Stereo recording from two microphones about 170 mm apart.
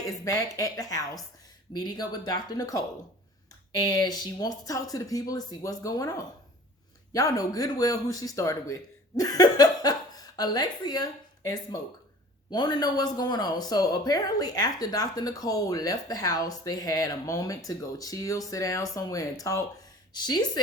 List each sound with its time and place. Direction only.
0.0 s speech: 20° left (ahead or behind)